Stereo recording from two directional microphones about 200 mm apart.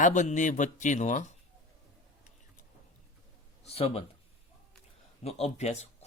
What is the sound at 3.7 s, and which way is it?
Speech, 30° left (ahead or behind).